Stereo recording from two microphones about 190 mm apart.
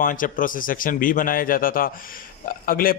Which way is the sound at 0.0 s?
45° left (ahead or behind).